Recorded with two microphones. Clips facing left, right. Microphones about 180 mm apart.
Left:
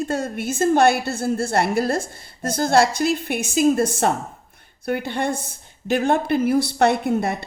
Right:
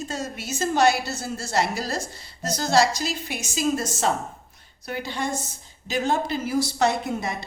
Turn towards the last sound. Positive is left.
turn(degrees=60)  # may be behind; listen again after turning